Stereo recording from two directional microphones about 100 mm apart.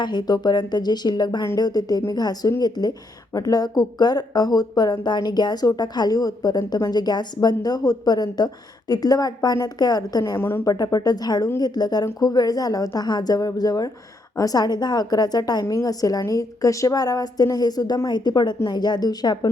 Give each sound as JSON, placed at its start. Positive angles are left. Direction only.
{"t": 0.0, "sound": "a woman's voice", "side_deg": 45}
{"t": 10.3, "sound": "a woman's voice", "side_deg": 25}
{"t": 10.7, "sound": "a woman's voice", "side_deg": 40}